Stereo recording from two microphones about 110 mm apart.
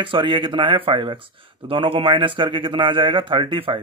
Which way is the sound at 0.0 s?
50° right (ahead or behind).